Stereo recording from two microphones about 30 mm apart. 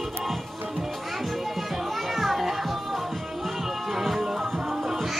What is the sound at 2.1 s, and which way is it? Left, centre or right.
Children playing, centre.